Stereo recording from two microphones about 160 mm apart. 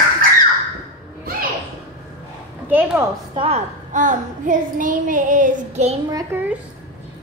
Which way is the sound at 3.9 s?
50° right (ahead or behind).